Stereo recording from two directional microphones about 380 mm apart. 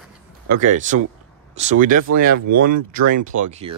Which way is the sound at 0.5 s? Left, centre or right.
Centre.